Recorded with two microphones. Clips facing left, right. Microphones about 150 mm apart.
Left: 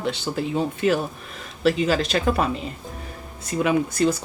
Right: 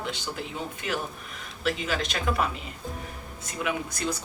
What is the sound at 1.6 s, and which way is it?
Speech, 30° left (ahead or behind).